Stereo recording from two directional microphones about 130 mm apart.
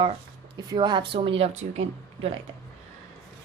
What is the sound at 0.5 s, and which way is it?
Speech, 35° right (ahead or behind).